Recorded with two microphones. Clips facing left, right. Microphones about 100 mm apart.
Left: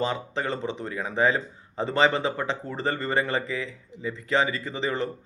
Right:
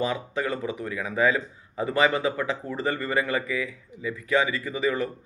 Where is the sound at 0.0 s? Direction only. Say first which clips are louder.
Right 1 dB; 30° left (ahead or behind).